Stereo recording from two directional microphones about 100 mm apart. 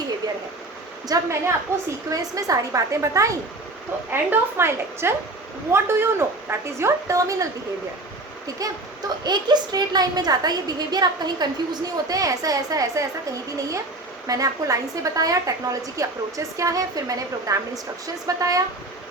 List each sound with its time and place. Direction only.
1.0 s a woman's voice: 35° right (ahead or behind)
8.6 s a woman's voice: 35° right (ahead or behind)
14.3 s a woman's voice: 35° right (ahead or behind)